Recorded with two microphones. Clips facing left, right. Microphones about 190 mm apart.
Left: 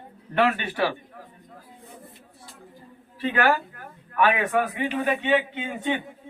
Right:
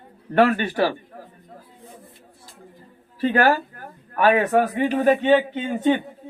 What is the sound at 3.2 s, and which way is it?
A man's voice, 40° right (ahead or behind).